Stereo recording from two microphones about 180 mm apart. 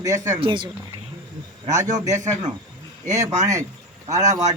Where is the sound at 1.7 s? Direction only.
40° right (ahead or behind).